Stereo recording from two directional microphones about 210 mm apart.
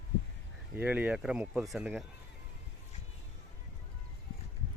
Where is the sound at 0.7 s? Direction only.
5° right (ahead or behind).